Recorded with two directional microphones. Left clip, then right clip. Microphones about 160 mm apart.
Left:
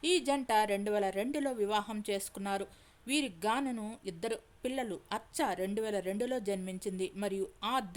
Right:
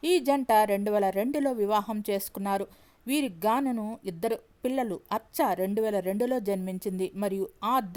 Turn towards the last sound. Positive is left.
turn(degrees=-35)  # may be behind; listen again after turning